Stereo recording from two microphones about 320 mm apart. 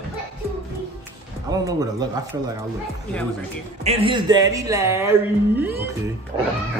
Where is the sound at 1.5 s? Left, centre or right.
Centre.